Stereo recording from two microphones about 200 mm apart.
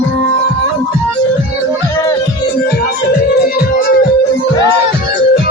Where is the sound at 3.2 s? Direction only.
50° left (ahead or behind).